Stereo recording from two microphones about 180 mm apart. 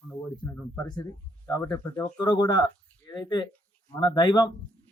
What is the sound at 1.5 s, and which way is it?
Speech, 20° left (ahead or behind).